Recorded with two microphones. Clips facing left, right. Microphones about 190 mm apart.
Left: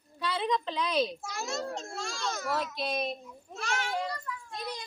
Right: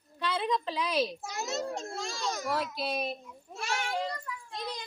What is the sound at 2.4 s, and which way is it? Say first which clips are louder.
Speech: left 1 dB; centre (ahead or behind).